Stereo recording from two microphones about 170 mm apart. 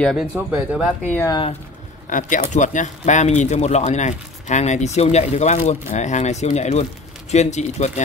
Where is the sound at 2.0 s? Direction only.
50° left (ahead or behind).